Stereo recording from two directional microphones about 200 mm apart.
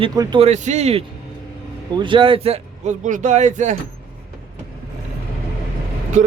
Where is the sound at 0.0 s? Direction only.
20° right (ahead or behind); by 3.8 s 35° right (ahead or behind).